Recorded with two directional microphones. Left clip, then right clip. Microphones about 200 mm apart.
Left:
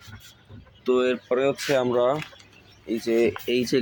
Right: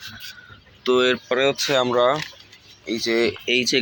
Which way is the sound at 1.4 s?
10° left (ahead or behind).